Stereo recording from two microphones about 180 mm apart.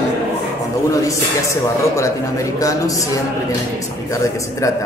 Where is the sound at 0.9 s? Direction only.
15° left (ahead or behind).